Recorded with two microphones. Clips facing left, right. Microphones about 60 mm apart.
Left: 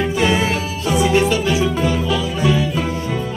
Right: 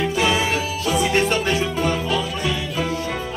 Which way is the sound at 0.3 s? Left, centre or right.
Centre.